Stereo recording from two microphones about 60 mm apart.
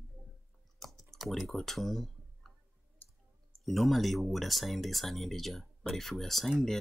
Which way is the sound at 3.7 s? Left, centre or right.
Centre.